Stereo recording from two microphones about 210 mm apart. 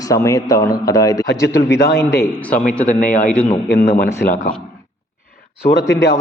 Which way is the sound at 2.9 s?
40° left (ahead or behind).